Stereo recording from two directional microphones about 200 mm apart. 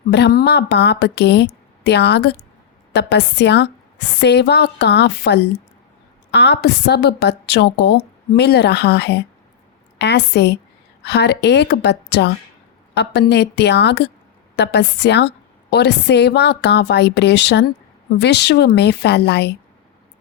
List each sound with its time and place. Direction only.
0.1 s a woman's voice: 55° left (ahead or behind)